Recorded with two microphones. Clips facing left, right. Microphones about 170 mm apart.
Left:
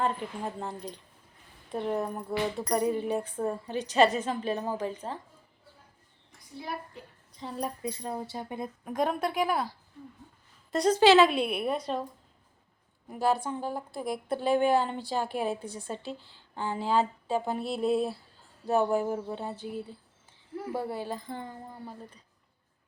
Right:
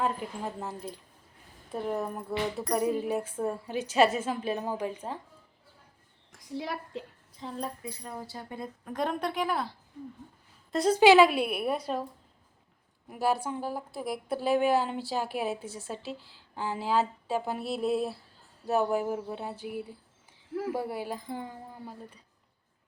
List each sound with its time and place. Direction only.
0.0 s a woman's voice: 5° right (ahead or behind)
6.3 s a woman's voice: 90° right
7.3 s a woman's voice: centre (ahead or behind)
7.8 s a woman's voice: 25° left (ahead or behind); by 9.7 s 10° left (ahead or behind)
10.7 s a woman's voice: 5° right (ahead or behind)
13.1 s a woman's voice: 5° right (ahead or behind)